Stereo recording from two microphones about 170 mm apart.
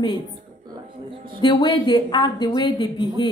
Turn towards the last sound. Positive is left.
turn(degrees=25)  # may be behind; listen again after turning